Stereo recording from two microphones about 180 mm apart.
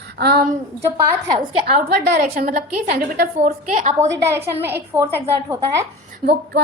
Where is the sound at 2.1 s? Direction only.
50° right (ahead or behind).